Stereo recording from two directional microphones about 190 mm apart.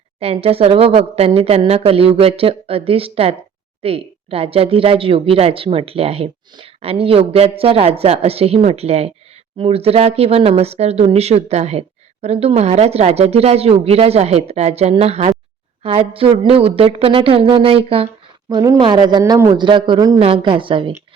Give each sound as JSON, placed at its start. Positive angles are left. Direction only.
{"t": 0.2, "sound": "a woman's voice", "side_deg": -30}